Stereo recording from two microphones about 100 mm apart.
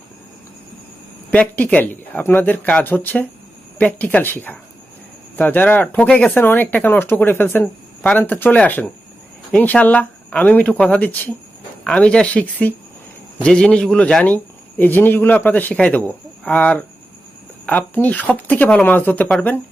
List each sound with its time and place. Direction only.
1.3 s speech: 15° left (ahead or behind)